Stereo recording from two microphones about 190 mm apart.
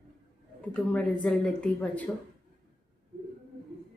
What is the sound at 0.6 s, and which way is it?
Speech, 5° left (ahead or behind).